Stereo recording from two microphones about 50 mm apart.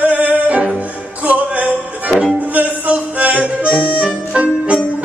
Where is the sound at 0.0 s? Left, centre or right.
Right.